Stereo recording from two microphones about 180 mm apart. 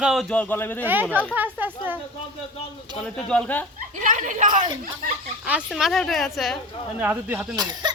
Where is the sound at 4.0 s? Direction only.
45° right (ahead or behind).